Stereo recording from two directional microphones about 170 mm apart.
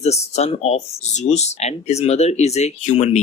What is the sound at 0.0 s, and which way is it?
Speech, 40° left (ahead or behind).